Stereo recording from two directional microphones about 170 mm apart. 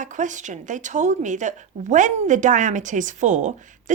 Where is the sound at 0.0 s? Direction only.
45° right (ahead or behind).